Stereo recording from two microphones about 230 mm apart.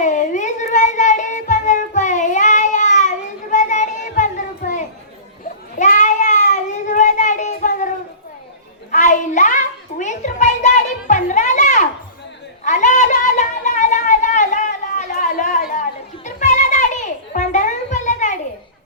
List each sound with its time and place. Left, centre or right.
0.0 s child singing: left
8.9 s a sound: left
16.2 s children playing: left